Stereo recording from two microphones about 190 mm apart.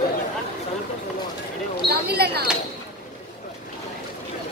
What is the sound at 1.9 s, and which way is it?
Speech, 55° right (ahead or behind).